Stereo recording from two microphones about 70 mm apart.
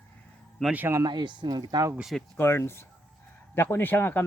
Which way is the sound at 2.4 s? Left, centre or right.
Left.